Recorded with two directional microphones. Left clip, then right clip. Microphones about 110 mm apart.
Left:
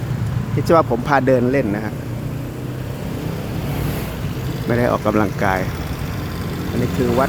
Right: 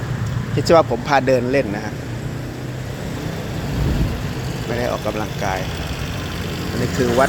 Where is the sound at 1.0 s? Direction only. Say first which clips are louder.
Left 1 dB; 25° left (ahead or behind).